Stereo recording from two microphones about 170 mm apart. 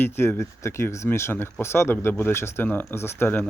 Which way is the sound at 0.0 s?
15° left (ahead or behind).